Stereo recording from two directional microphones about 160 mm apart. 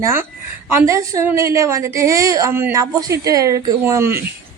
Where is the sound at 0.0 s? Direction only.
15° right (ahead or behind).